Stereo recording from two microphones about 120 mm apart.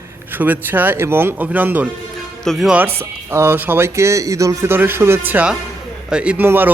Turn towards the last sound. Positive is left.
turn(degrees=-15)  # may be behind; listen again after turning